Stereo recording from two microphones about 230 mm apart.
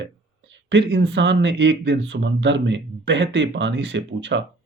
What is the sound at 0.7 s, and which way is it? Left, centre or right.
Speech, right.